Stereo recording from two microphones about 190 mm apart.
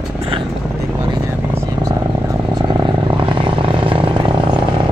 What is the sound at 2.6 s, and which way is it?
Vehicle, 25° right (ahead or behind).